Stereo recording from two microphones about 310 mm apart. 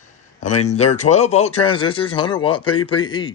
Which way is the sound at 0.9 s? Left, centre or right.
Left.